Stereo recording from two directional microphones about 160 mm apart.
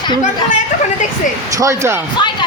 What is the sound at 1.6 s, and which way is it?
Speech, 20° right (ahead or behind).